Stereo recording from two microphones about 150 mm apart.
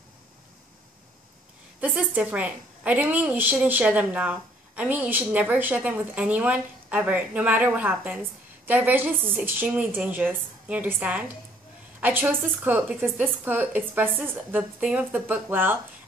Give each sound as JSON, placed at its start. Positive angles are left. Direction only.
{"t": 1.8, "sound": "a woman's voice", "side_deg": -10}